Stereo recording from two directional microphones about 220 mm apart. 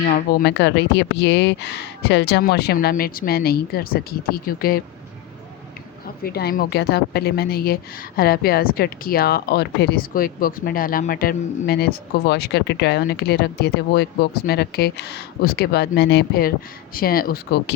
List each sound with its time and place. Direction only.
0.1 s a woman's voice: 45° left (ahead or behind)
6.2 s a woman's voice: 45° left (ahead or behind)